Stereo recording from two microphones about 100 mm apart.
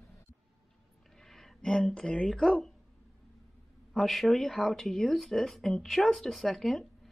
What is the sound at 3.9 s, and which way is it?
Speech, centre (ahead or behind).